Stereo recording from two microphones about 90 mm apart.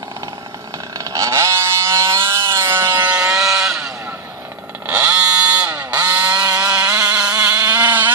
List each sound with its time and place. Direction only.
0.9 s vehicle: 40° right (ahead or behind)
2.5 s sawing: 30° right (ahead or behind)
3.2 s vehicle: 30° right (ahead or behind)
3.4 s vehicle: 5° right (ahead or behind)
4.8 s vehicle: 20° right (ahead or behind)
6.3 s vehicle: 40° right (ahead or behind)
7.2 s vehicle: 15° right (ahead or behind)